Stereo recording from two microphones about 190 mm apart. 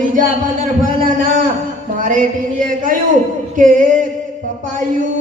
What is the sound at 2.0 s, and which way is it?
Speech, 40° right (ahead or behind).